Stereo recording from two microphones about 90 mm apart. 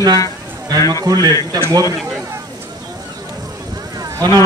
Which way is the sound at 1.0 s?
50° right (ahead or behind).